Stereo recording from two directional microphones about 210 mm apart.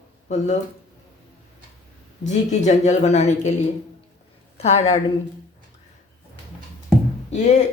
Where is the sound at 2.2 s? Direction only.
35° left (ahead or behind).